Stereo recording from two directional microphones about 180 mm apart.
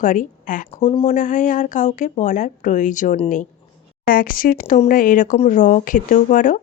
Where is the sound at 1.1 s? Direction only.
45° left (ahead or behind).